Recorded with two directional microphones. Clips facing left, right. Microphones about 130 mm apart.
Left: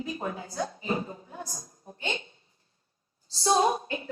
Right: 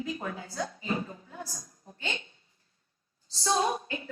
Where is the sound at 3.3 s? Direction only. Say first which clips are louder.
Left 4 dB; 30° left (ahead or behind).